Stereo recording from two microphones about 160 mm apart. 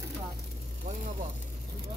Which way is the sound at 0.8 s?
50° right (ahead or behind).